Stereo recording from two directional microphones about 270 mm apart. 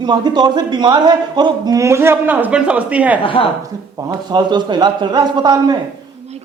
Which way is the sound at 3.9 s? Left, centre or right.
Centre.